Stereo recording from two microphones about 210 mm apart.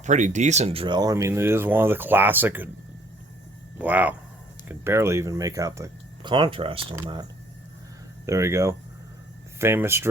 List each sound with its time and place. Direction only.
0.0 s speech: 35° right (ahead or behind); by 2.6 s 10° right (ahead or behind)
3.8 s speech: 5° right (ahead or behind); by 6.8 s 25° right (ahead or behind)
8.3 s speech: 15° right (ahead or behind)